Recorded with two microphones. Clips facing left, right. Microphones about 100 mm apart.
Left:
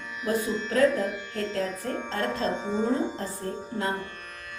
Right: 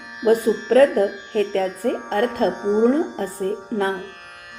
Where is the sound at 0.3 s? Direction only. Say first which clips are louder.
Right 11 dB; 85° right.